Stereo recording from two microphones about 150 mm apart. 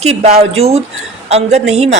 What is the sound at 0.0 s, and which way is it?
A woman's voice, 45° right (ahead or behind).